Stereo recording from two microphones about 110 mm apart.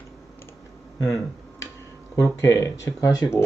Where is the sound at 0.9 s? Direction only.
30° left (ahead or behind).